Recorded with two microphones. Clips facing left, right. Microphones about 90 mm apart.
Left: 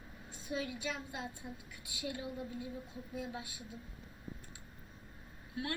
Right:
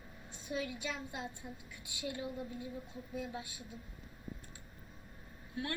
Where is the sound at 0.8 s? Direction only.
30° right (ahead or behind).